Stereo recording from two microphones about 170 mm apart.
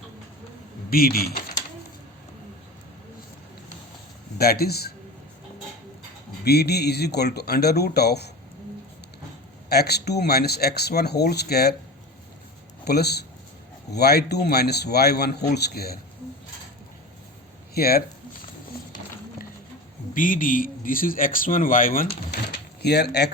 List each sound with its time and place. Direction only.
0.9 s speech: 60° left (ahead or behind)
4.4 s speech: 65° left (ahead or behind)
6.4 s speech: 70° left (ahead or behind)
9.6 s speech: 70° left (ahead or behind)
12.8 s speech: 70° left (ahead or behind)
17.7 s speech: 65° left (ahead or behind)
20.1 s speech: 55° left (ahead or behind)
22.5 s a sound: 75° left (ahead or behind)